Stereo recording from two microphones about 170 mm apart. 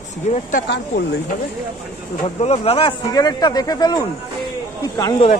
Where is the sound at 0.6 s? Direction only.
80° left.